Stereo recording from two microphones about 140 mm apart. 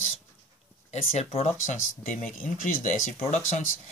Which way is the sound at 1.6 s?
60° left (ahead or behind).